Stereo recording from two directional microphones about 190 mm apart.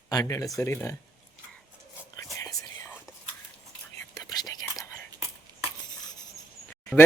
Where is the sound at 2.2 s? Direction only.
15° left (ahead or behind).